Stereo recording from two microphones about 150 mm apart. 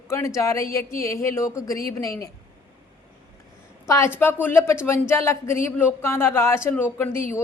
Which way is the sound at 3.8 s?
20° left (ahead or behind).